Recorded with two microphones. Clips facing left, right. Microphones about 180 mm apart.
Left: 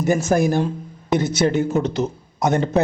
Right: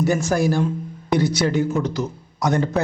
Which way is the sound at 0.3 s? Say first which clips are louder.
Left 2 dB; 20° left (ahead or behind).